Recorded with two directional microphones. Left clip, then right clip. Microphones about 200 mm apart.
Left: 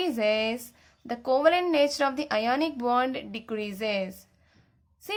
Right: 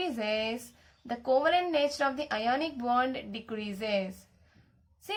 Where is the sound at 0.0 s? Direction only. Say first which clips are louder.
Left 6 dB; 35° left (ahead or behind).